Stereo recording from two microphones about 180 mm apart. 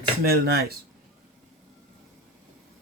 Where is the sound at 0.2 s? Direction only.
60° right (ahead or behind).